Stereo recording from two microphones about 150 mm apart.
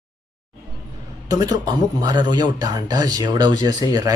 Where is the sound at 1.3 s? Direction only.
25° right (ahead or behind).